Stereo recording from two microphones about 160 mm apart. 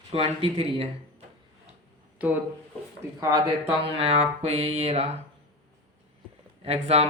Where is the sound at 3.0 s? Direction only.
20° right (ahead or behind); by 5.1 s 40° right (ahead or behind).